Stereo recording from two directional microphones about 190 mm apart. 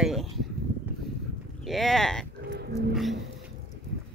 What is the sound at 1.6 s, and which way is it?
Speech, centre (ahead or behind).